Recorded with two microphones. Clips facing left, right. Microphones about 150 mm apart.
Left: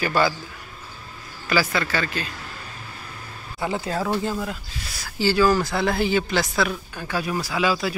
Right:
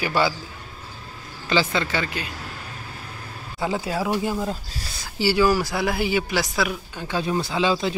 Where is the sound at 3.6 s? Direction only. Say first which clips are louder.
Right 1 dB; 10° right (ahead or behind).